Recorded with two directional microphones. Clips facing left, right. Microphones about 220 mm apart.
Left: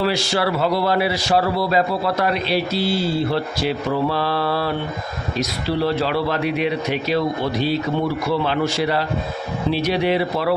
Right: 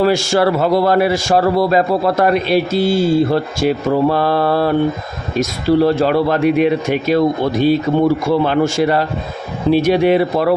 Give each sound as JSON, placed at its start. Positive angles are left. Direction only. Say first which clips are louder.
{"t": 0.0, "sound": "a man's voice", "louder": "right 7 dB", "side_deg": -45}